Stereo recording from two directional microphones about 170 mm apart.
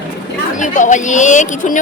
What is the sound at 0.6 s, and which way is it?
A woman's voice, 50° left (ahead or behind).